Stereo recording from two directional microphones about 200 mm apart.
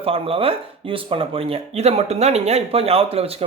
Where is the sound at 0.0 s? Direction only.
30° right (ahead or behind).